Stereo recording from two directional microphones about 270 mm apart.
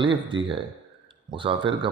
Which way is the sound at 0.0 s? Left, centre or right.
Centre.